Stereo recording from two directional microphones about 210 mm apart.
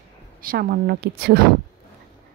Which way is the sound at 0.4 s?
45° right (ahead or behind).